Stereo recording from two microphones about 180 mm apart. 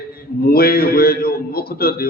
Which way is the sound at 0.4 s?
55° left (ahead or behind).